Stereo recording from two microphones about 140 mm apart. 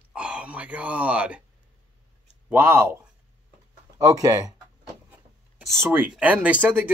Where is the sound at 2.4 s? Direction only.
15° right (ahead or behind).